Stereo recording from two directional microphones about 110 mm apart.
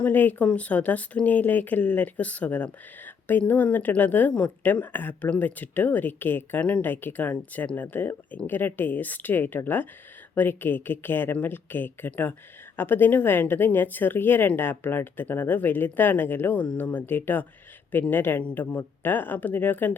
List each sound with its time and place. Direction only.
0.0 s speech: 15° left (ahead or behind)